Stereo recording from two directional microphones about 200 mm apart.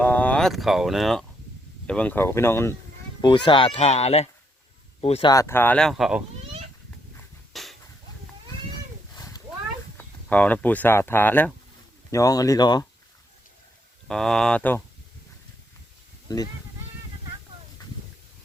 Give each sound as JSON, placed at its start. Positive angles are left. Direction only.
{"t": 0.0, "sound": "speech", "side_deg": 5}
{"t": 3.2, "sound": "speech", "side_deg": 20}
{"t": 5.3, "sound": "speech", "side_deg": 15}
{"t": 7.5, "sound": "a sound", "side_deg": 0}
{"t": 9.1, "sound": "a sound", "side_deg": 20}
{"t": 10.0, "sound": "speech", "side_deg": 10}
{"t": 14.1, "sound": "speech", "side_deg": 5}
{"t": 16.3, "sound": "speech", "side_deg": 20}